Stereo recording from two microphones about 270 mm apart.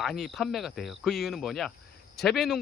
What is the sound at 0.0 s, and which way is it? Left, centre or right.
Speech, centre.